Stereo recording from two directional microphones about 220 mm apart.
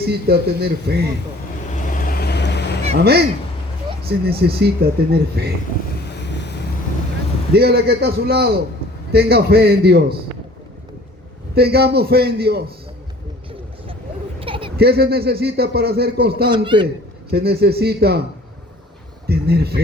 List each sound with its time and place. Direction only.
0.0 s a man's voice: 45° right (ahead or behind)
1.7 s vehicle: 40° left (ahead or behind)
3.0 s a man's voice: 45° right (ahead or behind)
4.3 s a man's voice: 45° right (ahead or behind)
7.5 s a man's voice: 45° right (ahead or behind)
11.5 s a man's voice: 45° right (ahead or behind)
14.4 s a sound: 25° right (ahead or behind)
14.8 s a man's voice: 45° right (ahead or behind)
16.5 s speech: 20° right (ahead or behind)
17.3 s a man's voice: 45° right (ahead or behind)
19.3 s a man's voice: 45° right (ahead or behind)